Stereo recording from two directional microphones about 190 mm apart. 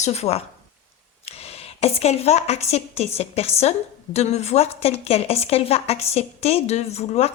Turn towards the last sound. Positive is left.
turn(degrees=35)  # may be behind; listen again after turning